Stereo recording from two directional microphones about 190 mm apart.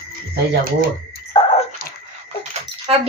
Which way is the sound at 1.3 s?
30° left (ahead or behind).